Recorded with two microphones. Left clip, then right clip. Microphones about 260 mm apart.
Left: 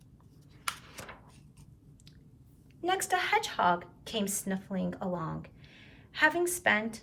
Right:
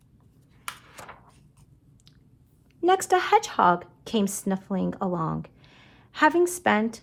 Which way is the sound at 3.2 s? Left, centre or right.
Centre.